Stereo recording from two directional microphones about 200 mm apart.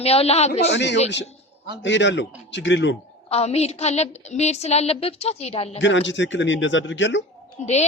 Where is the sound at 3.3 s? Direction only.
30° left (ahead or behind).